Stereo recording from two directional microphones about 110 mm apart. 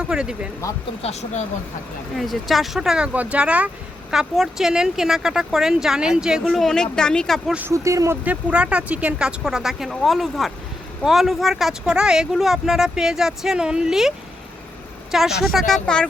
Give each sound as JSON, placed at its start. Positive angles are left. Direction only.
{"t": 0.0, "sound": "speech", "side_deg": -5}
{"t": 1.0, "sound": "speech", "side_deg": 90}
{"t": 2.1, "sound": "speech", "side_deg": 0}
{"t": 7.7, "sound": "speech", "side_deg": -30}
{"t": 8.2, "sound": "speech", "side_deg": -10}
{"t": 15.1, "sound": "speech", "side_deg": -5}